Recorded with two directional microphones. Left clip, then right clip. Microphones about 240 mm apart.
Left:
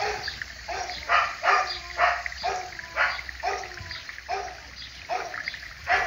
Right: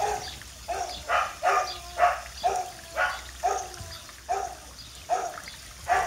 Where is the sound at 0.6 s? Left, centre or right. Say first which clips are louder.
Left 1 dB; left.